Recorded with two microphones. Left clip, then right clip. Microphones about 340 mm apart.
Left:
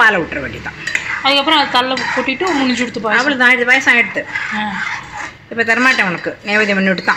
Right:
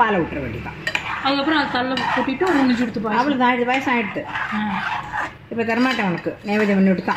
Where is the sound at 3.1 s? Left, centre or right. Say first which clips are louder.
Left 7 dB; left.